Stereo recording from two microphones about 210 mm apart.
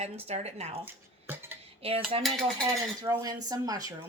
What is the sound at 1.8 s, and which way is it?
Cutlery, 25° right (ahead or behind).